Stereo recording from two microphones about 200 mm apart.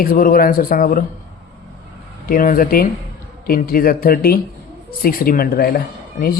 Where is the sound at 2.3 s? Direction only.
45° left (ahead or behind).